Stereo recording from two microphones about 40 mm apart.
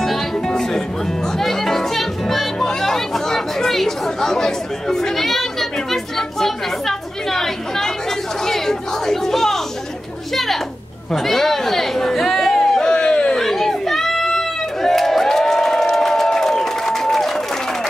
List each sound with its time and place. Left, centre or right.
0.5 s music: centre
1.4 s music: centre
2.6 s chatter: centre
11.2 s chatter: centre; by 13.4 s left
13.4 s a sound: centre